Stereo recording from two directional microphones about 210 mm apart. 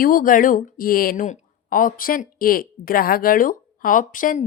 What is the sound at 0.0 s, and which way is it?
A woman's voice, 40° left (ahead or behind).